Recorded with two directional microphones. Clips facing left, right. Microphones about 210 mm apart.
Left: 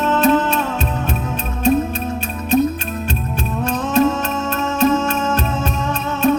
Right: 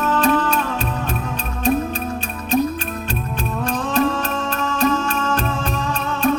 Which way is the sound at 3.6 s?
25° left (ahead or behind).